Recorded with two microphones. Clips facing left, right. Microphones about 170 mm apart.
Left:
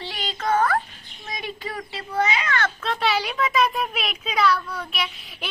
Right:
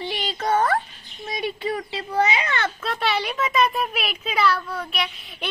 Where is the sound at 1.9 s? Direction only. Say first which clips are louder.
Even; 30° right (ahead or behind).